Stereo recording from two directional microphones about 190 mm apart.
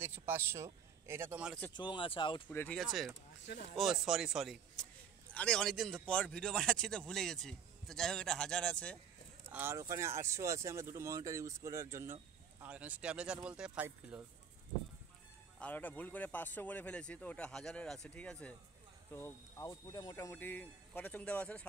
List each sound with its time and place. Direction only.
0.3 s speech: 10° right (ahead or behind)
1.7 s speech: 25° left (ahead or behind)
2.5 s speech: 5° left (ahead or behind)
9.5 s speech: 10° right (ahead or behind)
15.6 s speech: 10° left (ahead or behind)